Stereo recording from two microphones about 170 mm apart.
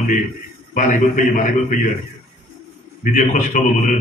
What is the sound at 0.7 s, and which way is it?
A man's voice, 50° left (ahead or behind).